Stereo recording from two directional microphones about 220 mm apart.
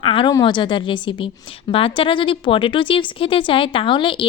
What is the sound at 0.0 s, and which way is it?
A woman's voice, 25° left (ahead or behind).